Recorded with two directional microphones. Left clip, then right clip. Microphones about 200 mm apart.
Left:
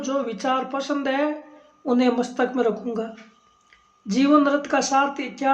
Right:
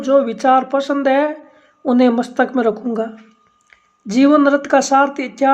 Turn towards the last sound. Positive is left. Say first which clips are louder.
# right 7 dB
turn(degrees=-35)  # may be behind; listen again after turning